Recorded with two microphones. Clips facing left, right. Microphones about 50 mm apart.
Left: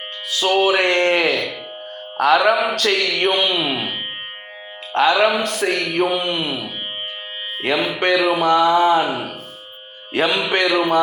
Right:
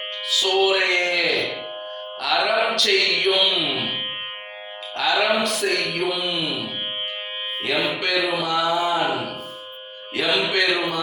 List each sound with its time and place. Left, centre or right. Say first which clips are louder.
0.3 s music: left 3 dB; left
4.9 s speech: left 5 dB; left
7.6 s music: left 4 dB; left
8.1 s speech: left 7 dB; left
8.4 s music: left 7 dB; left
10.2 s music: left 3 dB; left
10.5 s speech: left 5 dB; left